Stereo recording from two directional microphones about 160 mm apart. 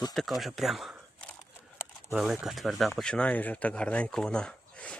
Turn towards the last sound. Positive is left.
turn(degrees=5)  # may be behind; listen again after turning